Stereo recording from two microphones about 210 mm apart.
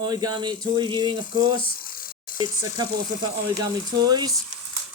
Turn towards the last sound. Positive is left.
turn(degrees=-20)  # may be behind; listen again after turning